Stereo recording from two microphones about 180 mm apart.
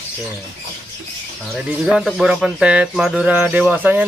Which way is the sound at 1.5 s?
5° right (ahead or behind).